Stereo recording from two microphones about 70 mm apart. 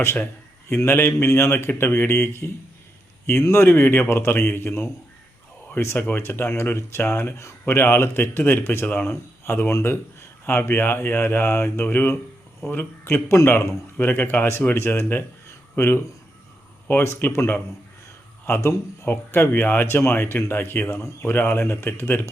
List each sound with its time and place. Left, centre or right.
0.9 s a man's voice: left
18.6 s a man's voice: left